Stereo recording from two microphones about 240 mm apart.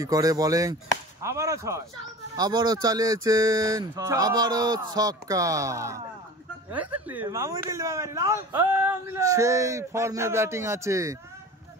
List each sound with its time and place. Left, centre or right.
0.0 s a man's voice: centre
7.1 s a man's voice: centre